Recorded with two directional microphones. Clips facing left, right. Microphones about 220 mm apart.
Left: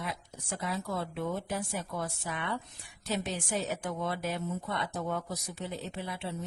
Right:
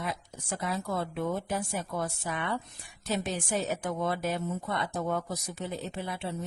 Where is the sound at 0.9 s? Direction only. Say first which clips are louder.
Right 4 dB; 50° right (ahead or behind).